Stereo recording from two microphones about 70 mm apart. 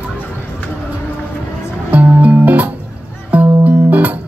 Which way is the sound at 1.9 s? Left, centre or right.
Right.